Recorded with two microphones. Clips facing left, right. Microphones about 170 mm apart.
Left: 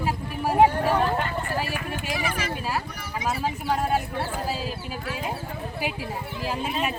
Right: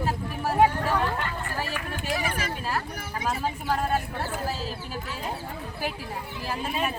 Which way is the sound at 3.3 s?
10° left (ahead or behind).